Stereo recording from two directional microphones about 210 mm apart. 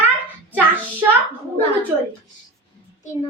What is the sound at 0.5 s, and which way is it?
Child singing, 10° right (ahead or behind).